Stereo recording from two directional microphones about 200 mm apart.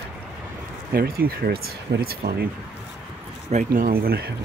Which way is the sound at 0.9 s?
50° right (ahead or behind).